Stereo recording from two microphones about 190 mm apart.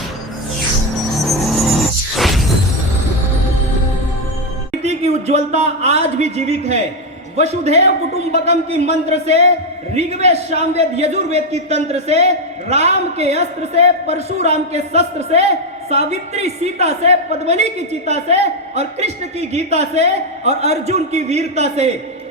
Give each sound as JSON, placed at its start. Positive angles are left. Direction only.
{"t": 1.2, "sound": "music", "side_deg": 0}
{"t": 4.8, "sound": "a man's voice", "side_deg": -35}